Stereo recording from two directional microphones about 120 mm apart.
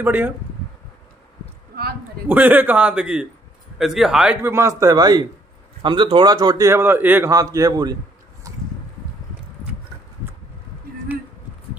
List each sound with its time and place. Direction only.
0.0 s a man's voice: 15° right (ahead or behind)
2.2 s a man's voice: 15° right (ahead or behind)
4.4 s a man's voice: 20° right (ahead or behind)
7.2 s a man's voice: 30° right (ahead or behind)